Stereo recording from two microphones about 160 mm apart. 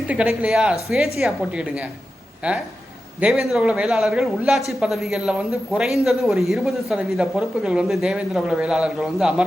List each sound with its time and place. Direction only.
0.1 s a woman's voice: 5° right (ahead or behind)